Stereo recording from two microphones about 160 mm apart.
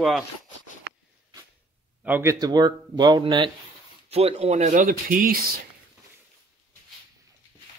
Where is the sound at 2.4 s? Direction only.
25° right (ahead or behind).